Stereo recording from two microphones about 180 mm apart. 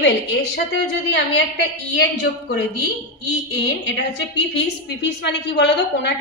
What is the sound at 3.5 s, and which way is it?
Speech, 90° left.